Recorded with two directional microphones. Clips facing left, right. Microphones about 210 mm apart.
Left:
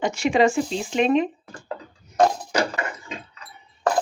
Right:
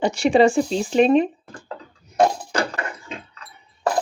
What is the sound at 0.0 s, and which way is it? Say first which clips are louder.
Speech: right 3 dB; 35° right (ahead or behind).